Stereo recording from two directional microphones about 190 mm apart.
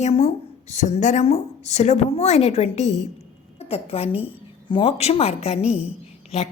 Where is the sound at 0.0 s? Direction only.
35° left (ahead or behind).